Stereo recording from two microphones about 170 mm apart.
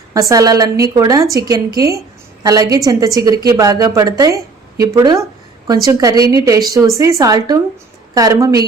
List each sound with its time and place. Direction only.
0.1 s a woman's voice: 20° right (ahead or behind)